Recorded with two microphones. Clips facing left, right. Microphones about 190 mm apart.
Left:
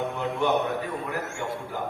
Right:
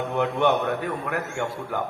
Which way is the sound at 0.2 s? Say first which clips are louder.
Right 4 dB; 65° right (ahead or behind).